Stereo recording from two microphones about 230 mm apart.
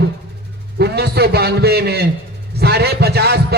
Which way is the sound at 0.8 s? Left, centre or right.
Right.